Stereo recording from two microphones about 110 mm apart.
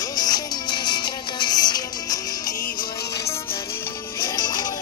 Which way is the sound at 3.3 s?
25° left (ahead or behind).